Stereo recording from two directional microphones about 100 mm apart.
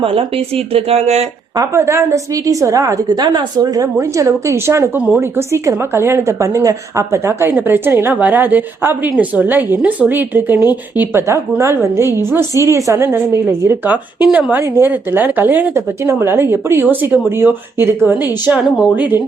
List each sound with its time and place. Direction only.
0.0 s speech: 65° right (ahead or behind); by 1.3 s 90° right
1.5 s a woman's voice: 30° right (ahead or behind)
3.1 s a woman's voice: 45° right (ahead or behind); by 14.6 s 10° right (ahead or behind)
14.6 s a woman's voice: 25° right (ahead or behind)
18.6 s speech: centre (ahead or behind)
18.9 s a woman's voice: 20° right (ahead or behind)